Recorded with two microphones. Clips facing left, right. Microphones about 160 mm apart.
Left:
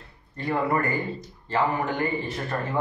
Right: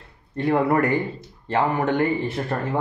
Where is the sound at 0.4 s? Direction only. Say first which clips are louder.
Right 6 dB; 70° right (ahead or behind).